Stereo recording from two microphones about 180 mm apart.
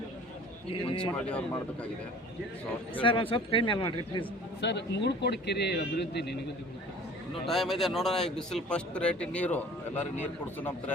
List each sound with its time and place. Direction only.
0.7 s speech: 30° left (ahead or behind)
1.1 s speech: 5° left (ahead or behind)
3.0 s speech: 30° left (ahead or behind)
4.6 s a man's voice: 70° left (ahead or behind)
7.4 s speech: centre (ahead or behind)